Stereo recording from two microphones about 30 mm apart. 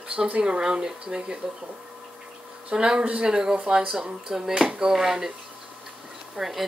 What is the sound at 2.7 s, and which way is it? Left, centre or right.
Speech, right.